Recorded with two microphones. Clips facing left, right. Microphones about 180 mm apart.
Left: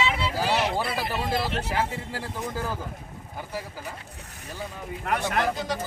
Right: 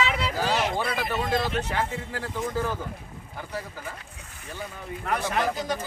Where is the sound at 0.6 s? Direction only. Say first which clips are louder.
Even; 5° left (ahead or behind).